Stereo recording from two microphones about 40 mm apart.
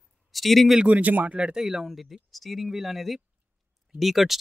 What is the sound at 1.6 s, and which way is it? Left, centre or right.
Speech, centre.